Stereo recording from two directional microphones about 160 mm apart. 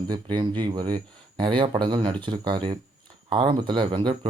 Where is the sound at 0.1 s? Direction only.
30° right (ahead or behind).